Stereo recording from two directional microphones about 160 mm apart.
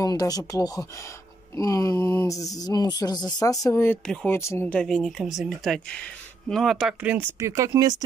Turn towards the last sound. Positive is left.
turn(degrees=-20)  # may be behind; listen again after turning